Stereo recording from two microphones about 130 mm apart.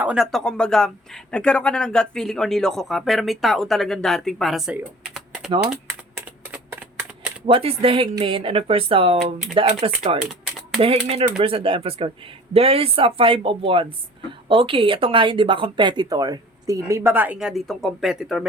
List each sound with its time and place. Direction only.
0.0 s speech: 10° right (ahead or behind)
0.3 s speech: 5° left (ahead or behind)
7.4 s speech: 45° right (ahead or behind)
9.1 s speech: centre (ahead or behind)
9.8 s speech: 45° right (ahead or behind); by 18.4 s 5° right (ahead or behind)